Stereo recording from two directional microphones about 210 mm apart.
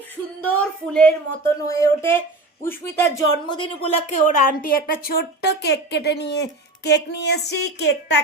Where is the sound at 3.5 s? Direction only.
25° left (ahead or behind).